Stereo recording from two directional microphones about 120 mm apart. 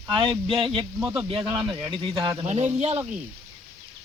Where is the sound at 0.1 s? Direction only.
45° right (ahead or behind).